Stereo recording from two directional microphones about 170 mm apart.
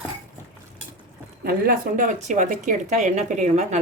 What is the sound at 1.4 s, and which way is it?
Speech, 55° right (ahead or behind).